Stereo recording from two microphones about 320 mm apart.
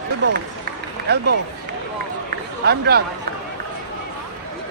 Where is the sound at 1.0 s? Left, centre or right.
Right.